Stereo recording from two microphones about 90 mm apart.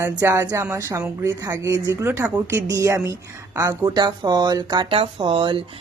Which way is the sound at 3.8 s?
50° right (ahead or behind).